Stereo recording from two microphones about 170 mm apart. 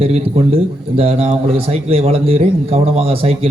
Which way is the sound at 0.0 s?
35° right (ahead or behind).